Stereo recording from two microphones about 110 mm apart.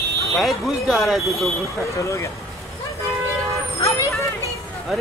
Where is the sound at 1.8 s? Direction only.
25° left (ahead or behind).